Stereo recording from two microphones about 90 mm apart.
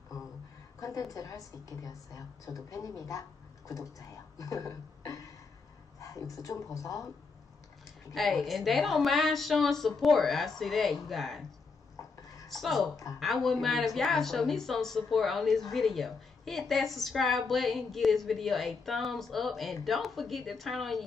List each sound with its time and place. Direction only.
0.7 s a woman's voice: 40° left (ahead or behind)
5.9 s a sound: 35° left (ahead or behind)
6.4 s a woman's voice: 40° left (ahead or behind)
8.1 s speech: centre (ahead or behind)
12.0 s dishes: 40° left (ahead or behind)
12.4 s speech: centre (ahead or behind)
12.9 s a woman's voice: 40° left (ahead or behind)
13.2 s speech: centre (ahead or behind)